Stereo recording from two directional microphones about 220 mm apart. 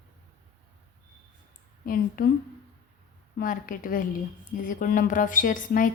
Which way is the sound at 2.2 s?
40° left (ahead or behind).